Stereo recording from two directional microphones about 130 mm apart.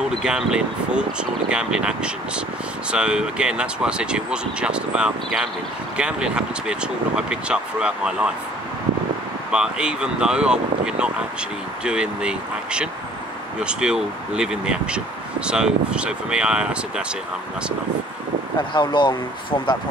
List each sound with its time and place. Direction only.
0.2 s speech: 5° right (ahead or behind)
9.5 s speech: 5° right (ahead or behind)
18.6 s speech: 40° left (ahead or behind)